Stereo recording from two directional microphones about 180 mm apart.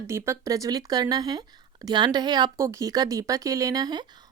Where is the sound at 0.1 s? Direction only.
15° right (ahead or behind).